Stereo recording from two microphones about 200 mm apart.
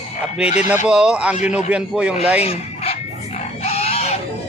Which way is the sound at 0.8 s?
5° right (ahead or behind).